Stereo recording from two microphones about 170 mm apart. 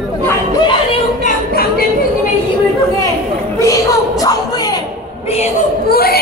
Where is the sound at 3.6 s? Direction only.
20° left (ahead or behind).